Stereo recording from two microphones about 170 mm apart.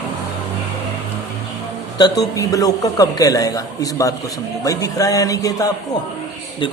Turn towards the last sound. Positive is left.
turn(degrees=20)  # may be behind; listen again after turning